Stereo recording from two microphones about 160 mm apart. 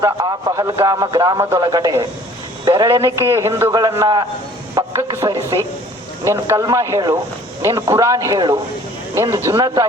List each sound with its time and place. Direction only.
0.0 s speech: 20° right (ahead or behind)